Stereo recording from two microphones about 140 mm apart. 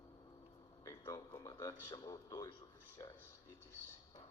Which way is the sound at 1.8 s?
30° left (ahead or behind).